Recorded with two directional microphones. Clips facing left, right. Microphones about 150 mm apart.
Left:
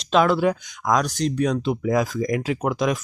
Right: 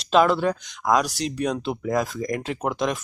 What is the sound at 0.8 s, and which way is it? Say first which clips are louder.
Speech: left 1 dB; 5° right (ahead or behind).